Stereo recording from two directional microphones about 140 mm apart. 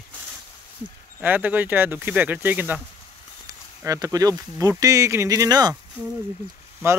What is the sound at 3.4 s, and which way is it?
Speech, 25° right (ahead or behind).